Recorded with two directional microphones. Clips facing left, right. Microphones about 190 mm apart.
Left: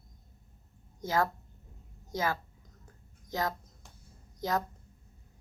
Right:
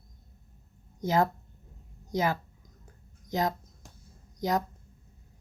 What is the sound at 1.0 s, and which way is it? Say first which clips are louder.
A woman's voice: right 4 dB; 20° right (ahead or behind).